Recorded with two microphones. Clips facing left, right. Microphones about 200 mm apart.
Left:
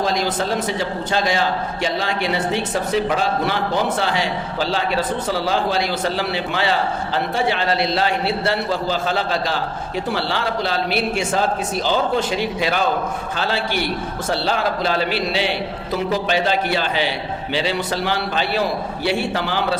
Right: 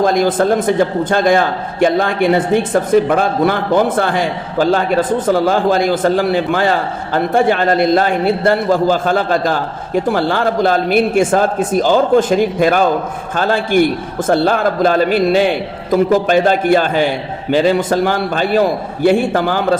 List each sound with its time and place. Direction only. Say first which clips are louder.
0.0 s a man's voice: right 8 dB; 50° right (ahead or behind)